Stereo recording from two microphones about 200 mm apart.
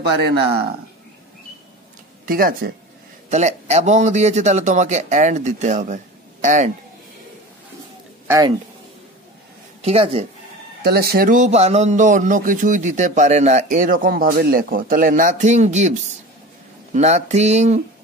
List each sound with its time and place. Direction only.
0.0 s speech: 55° right (ahead or behind)
2.2 s speech: 45° right (ahead or behind)
3.3 s a man's voice: 35° right (ahead or behind)
8.3 s speech: 15° right (ahead or behind)
9.8 s speech: 30° right (ahead or behind)
10.8 s a man's voice: 50° right (ahead or behind); by 17.8 s 35° right (ahead or behind)